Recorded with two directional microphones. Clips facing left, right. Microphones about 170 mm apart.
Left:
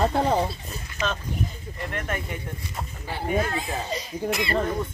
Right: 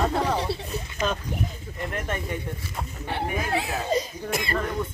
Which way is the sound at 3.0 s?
70° right (ahead or behind).